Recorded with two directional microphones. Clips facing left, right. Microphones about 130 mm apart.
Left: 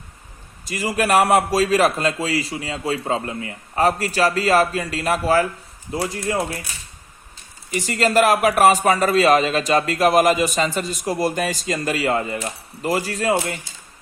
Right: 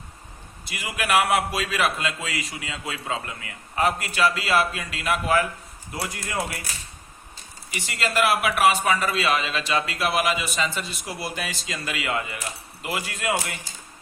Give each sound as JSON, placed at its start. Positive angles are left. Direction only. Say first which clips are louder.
{"t": 0.6, "sound": "a man's voice", "louder": "left 9 dB", "side_deg": 40}
{"t": 7.7, "sound": "a man's voice", "louder": "left 8 dB", "side_deg": 40}